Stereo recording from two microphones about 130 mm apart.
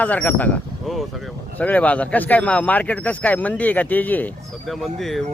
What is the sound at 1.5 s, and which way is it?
Speech, 10° left (ahead or behind).